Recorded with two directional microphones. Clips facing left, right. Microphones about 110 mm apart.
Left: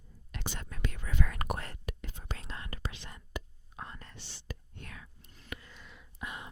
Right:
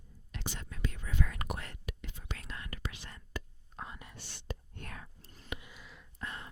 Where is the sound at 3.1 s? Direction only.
20° left (ahead or behind).